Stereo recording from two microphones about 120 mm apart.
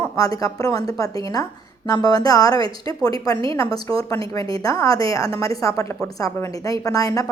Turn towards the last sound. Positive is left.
turn(degrees=30)  # may be behind; listen again after turning